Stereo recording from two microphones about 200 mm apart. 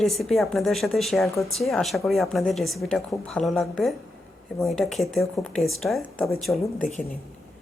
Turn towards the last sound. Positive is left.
turn(degrees=0)  # may be behind; listen again after turning